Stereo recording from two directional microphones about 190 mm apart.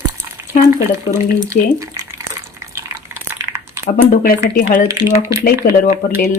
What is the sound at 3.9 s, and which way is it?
Speech, 45° left (ahead or behind).